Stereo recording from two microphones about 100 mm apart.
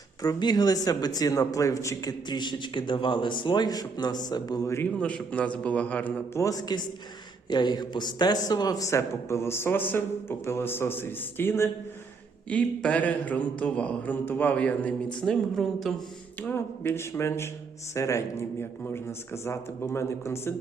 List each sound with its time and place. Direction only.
0.2 s speech: 45° left (ahead or behind)
4.9 s speech: 10° left (ahead or behind)
6.4 s a man's voice: 40° left (ahead or behind)
12.5 s speech: 15° left (ahead or behind)
16.4 s a man's voice: 20° left (ahead or behind)